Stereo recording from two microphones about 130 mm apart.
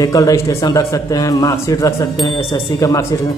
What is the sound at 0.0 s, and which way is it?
A man's voice, 25° left (ahead or behind).